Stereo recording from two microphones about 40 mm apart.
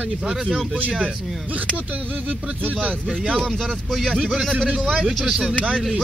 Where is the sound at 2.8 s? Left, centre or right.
Right.